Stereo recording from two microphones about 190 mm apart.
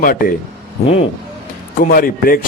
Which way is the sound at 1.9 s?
50° left (ahead or behind).